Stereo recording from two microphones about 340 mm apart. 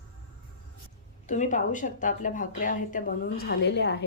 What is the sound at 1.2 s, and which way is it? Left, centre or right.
Speech, left.